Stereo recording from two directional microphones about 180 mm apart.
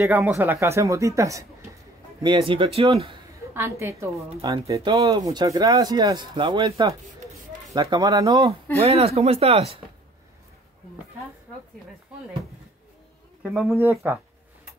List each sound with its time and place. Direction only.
0.0 s speech: 10° right (ahead or behind)
2.2 s speech: 25° right (ahead or behind)
3.5 s speech: 15° right (ahead or behind)
8.8 s speech: 35° right (ahead or behind)
13.4 s speech: 5° right (ahead or behind)